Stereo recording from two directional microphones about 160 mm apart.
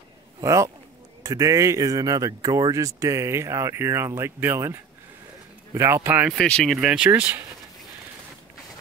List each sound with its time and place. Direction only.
0.4 s speech: 20° right (ahead or behind)
6.3 s speech: 5° left (ahead or behind); by 7.4 s 15° right (ahead or behind)